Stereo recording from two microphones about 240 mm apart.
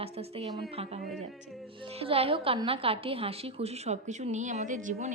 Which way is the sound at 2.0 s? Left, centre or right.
Right.